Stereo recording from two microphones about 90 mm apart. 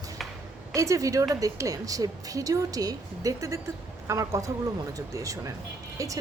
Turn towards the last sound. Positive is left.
turn(degrees=-40)  # may be behind; listen again after turning